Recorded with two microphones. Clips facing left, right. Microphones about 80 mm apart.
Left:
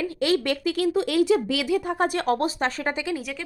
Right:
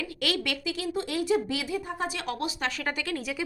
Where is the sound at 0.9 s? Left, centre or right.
Left.